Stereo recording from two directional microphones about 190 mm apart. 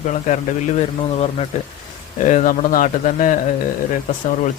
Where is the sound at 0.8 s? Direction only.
35° left (ahead or behind).